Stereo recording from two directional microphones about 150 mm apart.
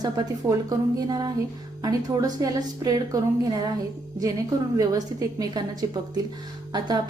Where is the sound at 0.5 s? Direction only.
20° right (ahead or behind).